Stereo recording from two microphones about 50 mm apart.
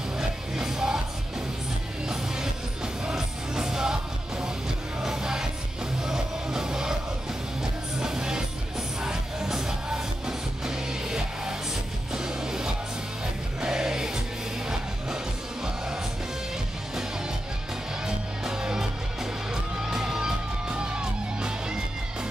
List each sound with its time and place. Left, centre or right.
0.2 s music: centre
2.0 s music: centre
8.0 s music: centre
18.0 s music: centre